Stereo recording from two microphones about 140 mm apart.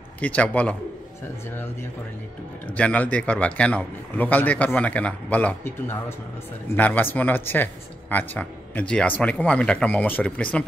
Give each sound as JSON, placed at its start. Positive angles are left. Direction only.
{"t": 0.2, "sound": "speech", "side_deg": 10}